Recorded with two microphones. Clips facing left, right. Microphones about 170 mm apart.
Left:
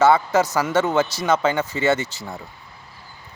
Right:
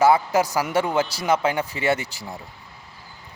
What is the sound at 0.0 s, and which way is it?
Speech, 10° right (ahead or behind).